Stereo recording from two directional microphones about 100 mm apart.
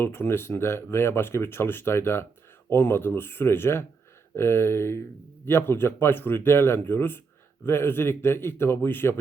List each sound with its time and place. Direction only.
0.0 s speech: 20° left (ahead or behind)